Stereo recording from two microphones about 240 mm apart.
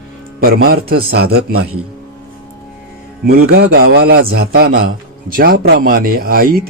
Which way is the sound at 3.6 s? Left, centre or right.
Right.